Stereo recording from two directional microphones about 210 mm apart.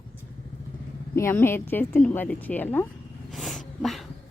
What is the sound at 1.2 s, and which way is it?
A woman's voice, 10° left (ahead or behind).